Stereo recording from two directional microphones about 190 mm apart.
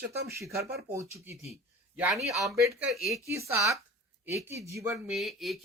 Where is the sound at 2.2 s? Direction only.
15° right (ahead or behind).